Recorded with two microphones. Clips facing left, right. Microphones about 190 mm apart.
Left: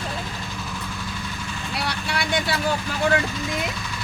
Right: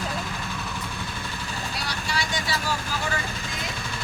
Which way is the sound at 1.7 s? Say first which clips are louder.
Left 5 dB; 60° left (ahead or behind).